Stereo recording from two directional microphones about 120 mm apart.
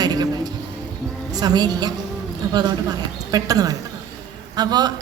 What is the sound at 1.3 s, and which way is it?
Speech, 35° right (ahead or behind).